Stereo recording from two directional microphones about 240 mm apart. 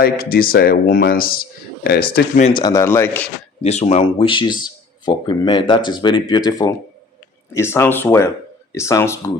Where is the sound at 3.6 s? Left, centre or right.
Left.